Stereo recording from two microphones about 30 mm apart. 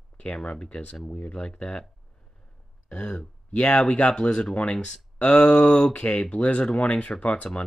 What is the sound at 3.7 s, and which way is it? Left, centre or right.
Speech, left.